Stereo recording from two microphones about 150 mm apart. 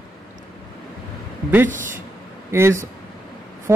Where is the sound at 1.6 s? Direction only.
60° right (ahead or behind).